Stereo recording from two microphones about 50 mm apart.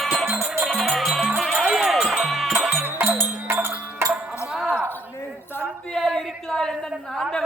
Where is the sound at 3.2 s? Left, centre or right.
Right.